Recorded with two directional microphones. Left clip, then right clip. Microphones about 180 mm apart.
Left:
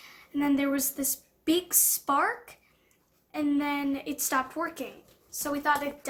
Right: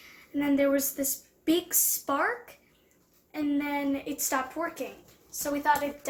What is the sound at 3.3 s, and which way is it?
A woman's voice, 55° left (ahead or behind).